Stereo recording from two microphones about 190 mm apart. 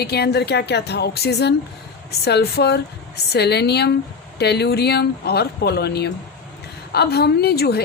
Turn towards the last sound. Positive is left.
turn(degrees=55)  # may be behind; listen again after turning